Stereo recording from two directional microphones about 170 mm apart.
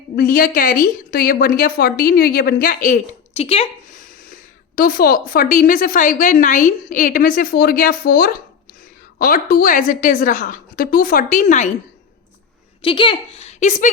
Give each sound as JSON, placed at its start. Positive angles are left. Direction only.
{"t": 0.2, "sound": "a woman's voice", "side_deg": 55}
{"t": 3.9, "sound": "a woman's voice", "side_deg": 55}
{"t": 12.8, "sound": "speech", "side_deg": 30}